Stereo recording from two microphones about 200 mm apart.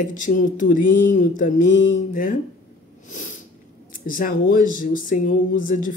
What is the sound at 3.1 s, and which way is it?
Snort, 40° left (ahead or behind).